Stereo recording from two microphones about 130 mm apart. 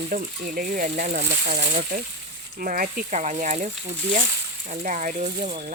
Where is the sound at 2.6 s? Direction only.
90° right.